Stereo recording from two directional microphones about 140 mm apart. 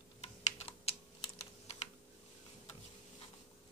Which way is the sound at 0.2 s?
40° left (ahead or behind).